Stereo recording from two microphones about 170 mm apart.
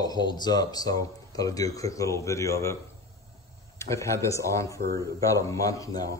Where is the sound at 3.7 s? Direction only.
15° left (ahead or behind).